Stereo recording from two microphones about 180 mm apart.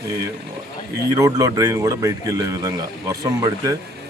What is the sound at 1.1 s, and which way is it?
Speech, 20° right (ahead or behind).